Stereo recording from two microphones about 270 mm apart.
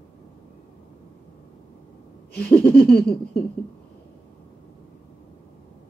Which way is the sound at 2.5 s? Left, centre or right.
Centre.